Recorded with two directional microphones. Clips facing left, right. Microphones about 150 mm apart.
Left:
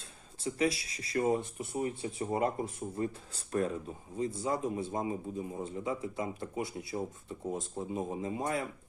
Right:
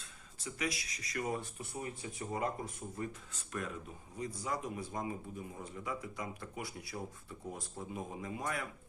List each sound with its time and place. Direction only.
0.0 s speech: 30° left (ahead or behind)